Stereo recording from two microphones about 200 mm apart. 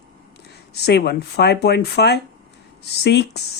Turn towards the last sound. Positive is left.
turn(degrees=55)  # may be behind; listen again after turning